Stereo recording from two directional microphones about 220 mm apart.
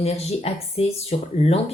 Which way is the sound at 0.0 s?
30° left (ahead or behind).